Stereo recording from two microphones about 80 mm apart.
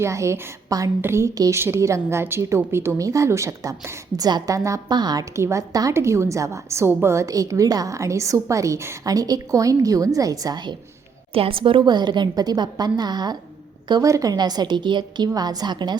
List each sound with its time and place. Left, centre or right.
0.0 s a woman's voice: right
4.2 s a woman's voice: right
4.5 s a woman's voice: right
4.9 s a woman's voice: right
5.3 s a woman's voice: right
5.9 s a woman's voice: right
9.0 s a woman's voice: right
11.5 s a woman's voice: right
14.0 s a woman's voice: right
15.4 s a woman's voice: right